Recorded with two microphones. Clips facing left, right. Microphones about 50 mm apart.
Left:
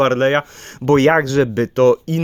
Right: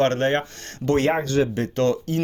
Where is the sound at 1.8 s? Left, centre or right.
Left.